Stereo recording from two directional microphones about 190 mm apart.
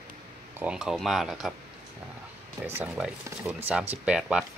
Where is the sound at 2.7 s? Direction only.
10° right (ahead or behind).